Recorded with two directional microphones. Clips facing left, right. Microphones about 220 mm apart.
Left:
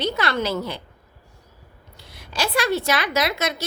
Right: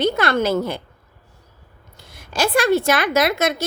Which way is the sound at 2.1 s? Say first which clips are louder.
Right 5 dB; 50° right (ahead or behind).